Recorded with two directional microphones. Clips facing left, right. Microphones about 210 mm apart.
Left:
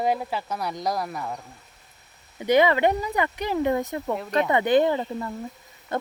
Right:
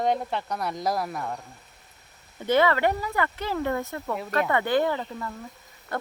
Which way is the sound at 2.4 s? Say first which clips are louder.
Left 3 dB; 15° left (ahead or behind).